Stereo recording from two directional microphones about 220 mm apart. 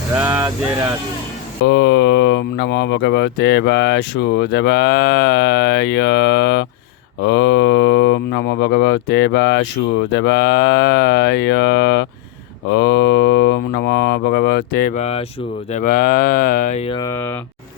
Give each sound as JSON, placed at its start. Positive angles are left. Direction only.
{"t": 0.2, "sound": "speech", "side_deg": -10}
{"t": 1.6, "sound": "speech", "side_deg": 50}
{"t": 17.0, "sound": "speech", "side_deg": 10}